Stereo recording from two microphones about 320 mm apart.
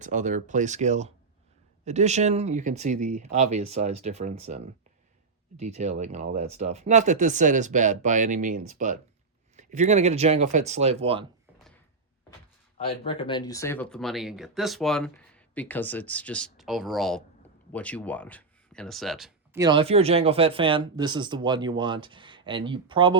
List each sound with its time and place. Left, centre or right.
0.0 s speech: right
12.8 s speech: centre
19.6 s speech: centre